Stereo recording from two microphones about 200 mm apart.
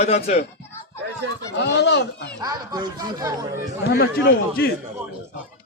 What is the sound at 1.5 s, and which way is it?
Speech, 60° left (ahead or behind).